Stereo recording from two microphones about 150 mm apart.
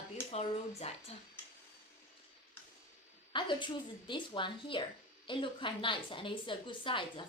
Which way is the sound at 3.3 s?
30° left (ahead or behind).